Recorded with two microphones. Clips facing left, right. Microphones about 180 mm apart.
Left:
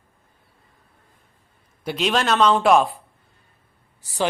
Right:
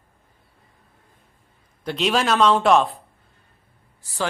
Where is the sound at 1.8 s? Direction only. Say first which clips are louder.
Even; 5° left (ahead or behind).